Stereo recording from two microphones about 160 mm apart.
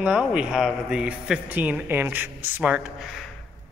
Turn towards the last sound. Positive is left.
turn(degrees=0)  # may be behind; listen again after turning